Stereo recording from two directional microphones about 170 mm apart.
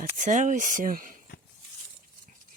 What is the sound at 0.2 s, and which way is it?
Speech, 50° right (ahead or behind).